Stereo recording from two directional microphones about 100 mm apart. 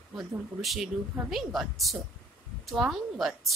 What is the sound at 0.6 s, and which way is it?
A woman's voice, centre (ahead or behind).